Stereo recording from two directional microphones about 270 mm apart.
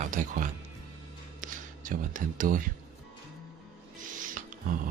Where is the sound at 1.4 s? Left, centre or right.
Right.